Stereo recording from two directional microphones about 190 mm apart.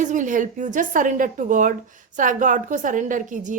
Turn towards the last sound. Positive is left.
turn(degrees=-40)  # may be behind; listen again after turning